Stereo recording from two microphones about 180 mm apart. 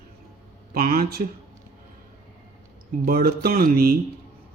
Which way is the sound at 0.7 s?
55° right (ahead or behind).